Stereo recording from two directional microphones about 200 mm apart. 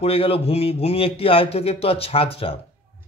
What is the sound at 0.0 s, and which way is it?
A man's voice, 30° left (ahead or behind).